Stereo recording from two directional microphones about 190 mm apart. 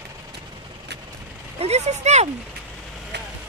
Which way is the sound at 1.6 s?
35° right (ahead or behind).